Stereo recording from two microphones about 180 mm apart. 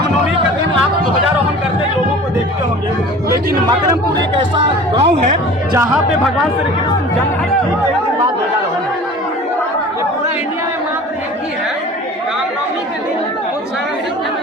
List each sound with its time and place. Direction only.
4.4 s speech: 30° right (ahead or behind)